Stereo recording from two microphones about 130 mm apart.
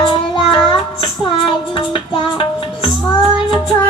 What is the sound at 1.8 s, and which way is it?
Music, 40° left (ahead or behind).